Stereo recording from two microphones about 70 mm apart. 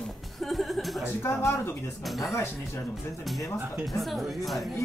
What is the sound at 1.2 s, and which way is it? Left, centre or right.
Speech, left.